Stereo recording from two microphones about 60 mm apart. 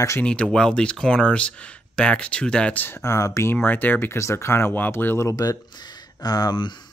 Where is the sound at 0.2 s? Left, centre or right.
Centre.